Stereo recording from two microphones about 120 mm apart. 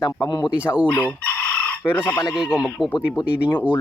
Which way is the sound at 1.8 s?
15° left (ahead or behind).